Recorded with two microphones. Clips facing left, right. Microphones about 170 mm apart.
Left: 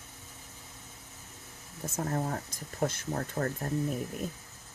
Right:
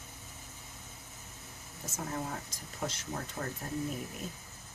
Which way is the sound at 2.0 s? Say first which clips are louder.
Left 4 dB; 50° left (ahead or behind).